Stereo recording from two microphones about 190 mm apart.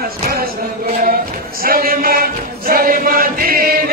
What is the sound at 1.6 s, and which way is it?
Choir, 50° right (ahead or behind).